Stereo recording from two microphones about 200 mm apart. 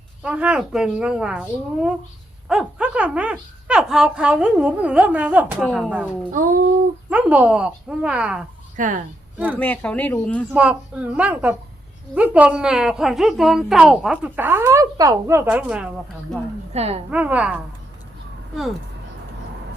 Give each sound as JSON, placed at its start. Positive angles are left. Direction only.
{"t": 0.2, "sound": "a woman's voice", "side_deg": -5}
{"t": 6.3, "sound": "a child's voice", "side_deg": -45}
{"t": 7.1, "sound": "a woman's voice", "side_deg": -5}
{"t": 8.7, "sound": "speech", "side_deg": -40}
{"t": 9.6, "sound": "speech", "side_deg": 5}
{"t": 10.5, "sound": "a woman's voice", "side_deg": -5}
{"t": 16.7, "sound": "a woman's voice", "side_deg": -30}
{"t": 17.1, "sound": "a woman's voice", "side_deg": -5}